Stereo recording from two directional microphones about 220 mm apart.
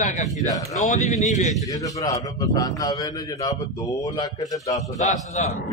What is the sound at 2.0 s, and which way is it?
Speech, 15° left (ahead or behind).